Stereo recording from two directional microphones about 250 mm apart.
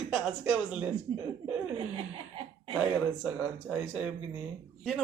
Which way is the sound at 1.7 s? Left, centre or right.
Right.